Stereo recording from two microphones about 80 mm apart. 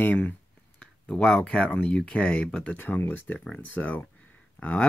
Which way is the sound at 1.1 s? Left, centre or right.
Centre.